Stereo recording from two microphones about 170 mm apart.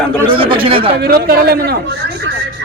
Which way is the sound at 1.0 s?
65° right (ahead or behind).